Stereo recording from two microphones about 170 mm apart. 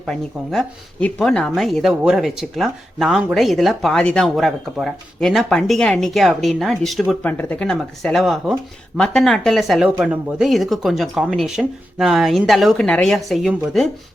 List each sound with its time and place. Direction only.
0.0 s speech: centre (ahead or behind)